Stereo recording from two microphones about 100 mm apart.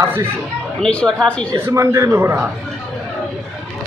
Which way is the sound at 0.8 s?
10° left (ahead or behind).